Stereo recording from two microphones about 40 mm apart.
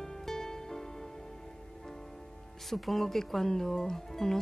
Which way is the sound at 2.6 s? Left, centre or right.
Centre.